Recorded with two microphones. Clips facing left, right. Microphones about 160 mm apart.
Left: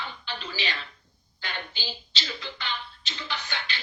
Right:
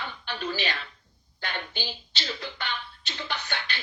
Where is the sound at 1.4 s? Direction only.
55° right (ahead or behind).